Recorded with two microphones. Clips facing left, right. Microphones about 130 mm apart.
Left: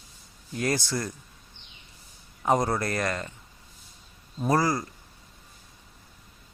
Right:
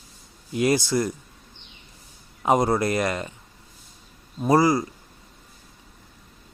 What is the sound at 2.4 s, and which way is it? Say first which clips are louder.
Speech: right 4 dB; 15° right (ahead or behind).